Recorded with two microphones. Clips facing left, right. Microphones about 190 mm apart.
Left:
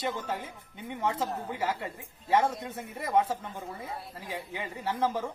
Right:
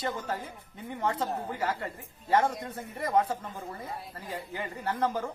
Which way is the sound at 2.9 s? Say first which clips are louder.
Even; 5° left (ahead or behind).